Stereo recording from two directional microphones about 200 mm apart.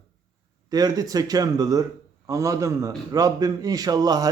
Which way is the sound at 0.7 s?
20° right (ahead or behind).